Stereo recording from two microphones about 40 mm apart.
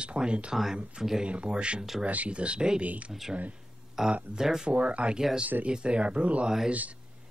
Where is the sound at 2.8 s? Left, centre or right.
Right.